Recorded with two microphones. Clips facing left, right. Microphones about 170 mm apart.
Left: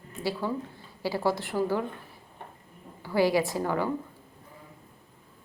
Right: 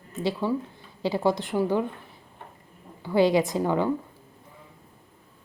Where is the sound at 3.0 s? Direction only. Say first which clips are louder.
Right 3 dB; 20° right (ahead or behind).